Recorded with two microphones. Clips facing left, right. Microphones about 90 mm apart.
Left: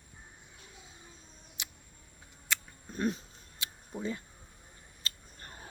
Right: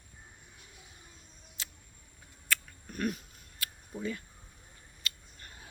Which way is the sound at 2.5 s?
25° left (ahead or behind).